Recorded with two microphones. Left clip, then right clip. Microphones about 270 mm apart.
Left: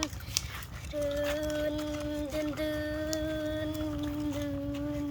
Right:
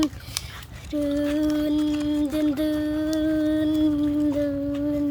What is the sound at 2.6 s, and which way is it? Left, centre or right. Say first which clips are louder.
Music: right 8 dB; right.